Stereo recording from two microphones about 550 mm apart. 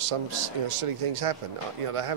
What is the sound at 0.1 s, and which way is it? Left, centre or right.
A man's voice, right.